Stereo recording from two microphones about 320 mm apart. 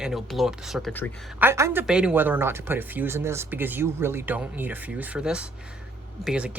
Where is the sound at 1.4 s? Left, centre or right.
Centre.